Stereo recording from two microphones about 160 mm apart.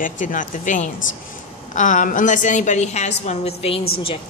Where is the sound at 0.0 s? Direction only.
55° left (ahead or behind).